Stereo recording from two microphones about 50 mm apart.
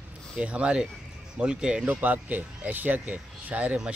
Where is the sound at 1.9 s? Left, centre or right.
Right.